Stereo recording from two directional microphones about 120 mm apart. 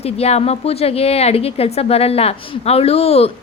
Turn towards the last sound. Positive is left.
turn(degrees=55)  # may be behind; listen again after turning